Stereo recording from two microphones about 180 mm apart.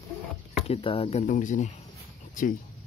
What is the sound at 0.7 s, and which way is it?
Speech, 30° left (ahead or behind).